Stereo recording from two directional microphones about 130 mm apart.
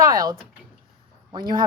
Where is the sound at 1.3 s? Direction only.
35° right (ahead or behind).